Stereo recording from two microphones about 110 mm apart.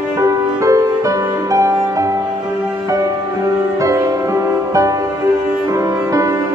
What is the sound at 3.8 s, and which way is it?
Music, 30° right (ahead or behind).